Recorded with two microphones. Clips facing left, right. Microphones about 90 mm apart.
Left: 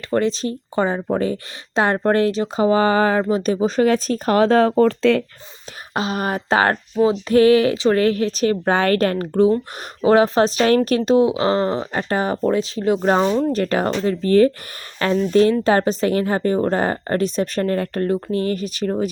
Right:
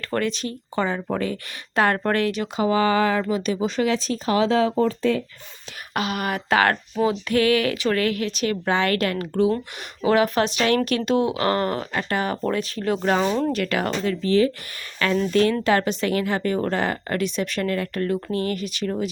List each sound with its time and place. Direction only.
0.1 s speech: 30° left (ahead or behind); by 4.7 s 50° left (ahead or behind)
4.8 s speech: 70° left (ahead or behind)
5.9 s speech: 30° left (ahead or behind)
13.2 s speech: 10° left (ahead or behind)
13.5 s speech: 35° left (ahead or behind)
14.3 s speech: 45° left (ahead or behind)
14.9 s speech: 30° left (ahead or behind)